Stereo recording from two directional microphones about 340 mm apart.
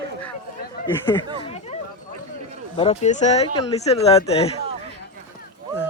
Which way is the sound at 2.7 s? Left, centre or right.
Centre.